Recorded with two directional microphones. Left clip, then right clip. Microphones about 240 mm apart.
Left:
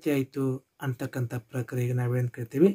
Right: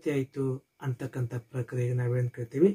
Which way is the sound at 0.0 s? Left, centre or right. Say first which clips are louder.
Left 2 dB; left.